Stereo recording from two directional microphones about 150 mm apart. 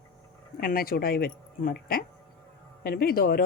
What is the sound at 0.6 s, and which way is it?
Speech, 75° left (ahead or behind).